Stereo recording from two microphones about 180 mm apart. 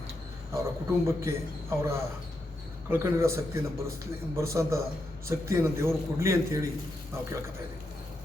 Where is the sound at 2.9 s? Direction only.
15° right (ahead or behind).